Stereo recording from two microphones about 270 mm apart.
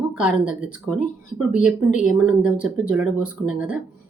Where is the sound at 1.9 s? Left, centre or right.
Left.